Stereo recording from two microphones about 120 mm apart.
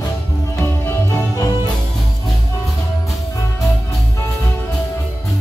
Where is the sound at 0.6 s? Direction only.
20° left (ahead or behind).